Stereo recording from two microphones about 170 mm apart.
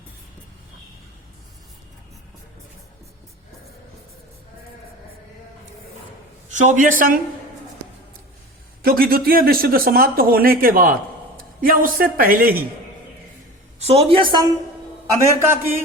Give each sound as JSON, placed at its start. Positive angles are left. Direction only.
{"t": 6.5, "sound": "a man's voice", "side_deg": -50}
{"t": 8.8, "sound": "speech", "side_deg": -60}
{"t": 13.7, "sound": "a woman's voice", "side_deg": -35}
{"t": 15.2, "sound": "a man's voice", "side_deg": -15}